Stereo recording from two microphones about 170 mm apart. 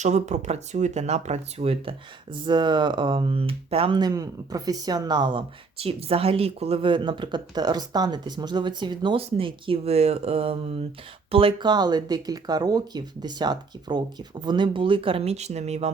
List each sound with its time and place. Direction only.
0.0 s speech: 40° right (ahead or behind)